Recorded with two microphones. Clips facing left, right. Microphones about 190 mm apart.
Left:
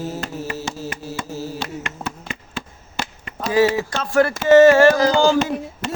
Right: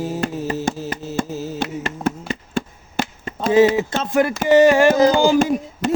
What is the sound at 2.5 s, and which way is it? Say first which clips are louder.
Chop: right 7 dB; 50° right (ahead or behind).